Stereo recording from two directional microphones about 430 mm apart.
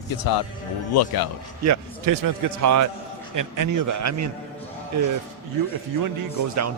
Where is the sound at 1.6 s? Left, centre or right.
Right.